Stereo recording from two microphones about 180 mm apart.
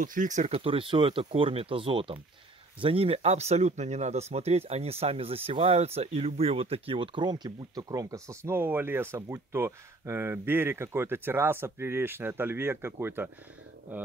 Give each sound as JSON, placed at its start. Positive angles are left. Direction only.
{"t": 0.0, "sound": "speech", "side_deg": -45}